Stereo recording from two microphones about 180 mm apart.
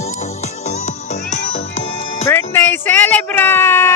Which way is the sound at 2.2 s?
10° left (ahead or behind).